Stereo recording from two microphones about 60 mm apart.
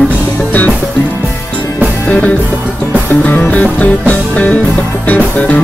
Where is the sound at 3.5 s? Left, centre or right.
Left.